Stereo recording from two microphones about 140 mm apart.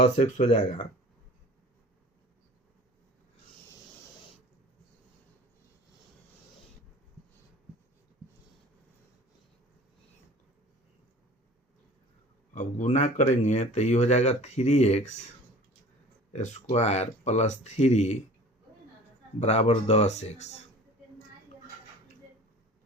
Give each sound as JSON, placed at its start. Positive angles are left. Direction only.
{"t": 0.0, "sound": "speech", "side_deg": 50}
{"t": 12.5, "sound": "speech", "side_deg": 60}
{"t": 16.3, "sound": "speech", "side_deg": 55}
{"t": 19.4, "sound": "speech", "side_deg": 50}